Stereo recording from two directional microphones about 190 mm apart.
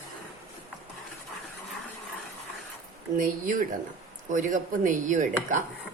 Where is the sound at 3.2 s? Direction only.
45° right (ahead or behind).